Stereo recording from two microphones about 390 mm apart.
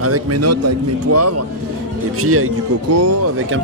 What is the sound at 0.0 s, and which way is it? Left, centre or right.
Speech, right.